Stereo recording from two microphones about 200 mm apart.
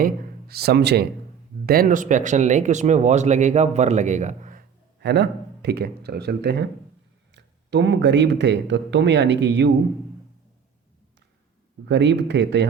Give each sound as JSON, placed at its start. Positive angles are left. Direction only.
{"t": 0.0, "sound": "a man's voice", "side_deg": -50}
{"t": 4.9, "sound": "speech", "side_deg": -55}
{"t": 11.9, "sound": "speech", "side_deg": -60}